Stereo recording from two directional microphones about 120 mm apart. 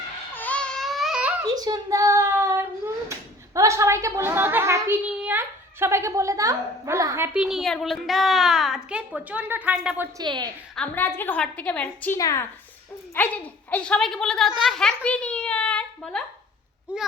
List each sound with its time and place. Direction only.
0.3 s baby cry: 10° left (ahead or behind); by 1.3 s 5° right (ahead or behind)
1.5 s child singing: 30° right (ahead or behind)
3.5 s a woman's voice: 25° right (ahead or behind)
7.3 s a woman's voice: 5° right (ahead or behind)
10.2 s a woman's voice: 35° right (ahead or behind)
10.8 s a woman's voice: 15° left (ahead or behind)
12.1 s speech: 25° left (ahead or behind)
13.1 s a woman's voice: 15° left (ahead or behind)
15.0 s a sound: 10° left (ahead or behind)
16.9 s a child's voice: 10° right (ahead or behind)